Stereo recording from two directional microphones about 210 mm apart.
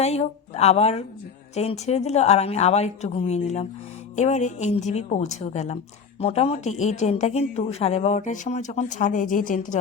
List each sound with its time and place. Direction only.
0.0 s speech: 30° left (ahead or behind)